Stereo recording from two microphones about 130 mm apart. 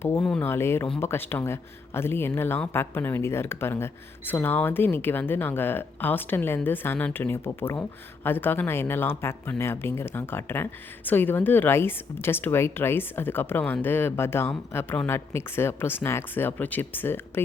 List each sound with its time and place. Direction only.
0.2 s speech: centre (ahead or behind)
0.4 s speech: 20° left (ahead or behind)